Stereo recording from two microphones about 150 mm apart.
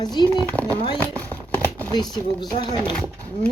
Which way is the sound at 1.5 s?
10° left (ahead or behind).